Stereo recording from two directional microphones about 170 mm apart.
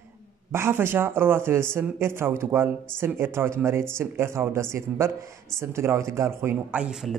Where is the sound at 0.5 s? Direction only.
15° right (ahead or behind).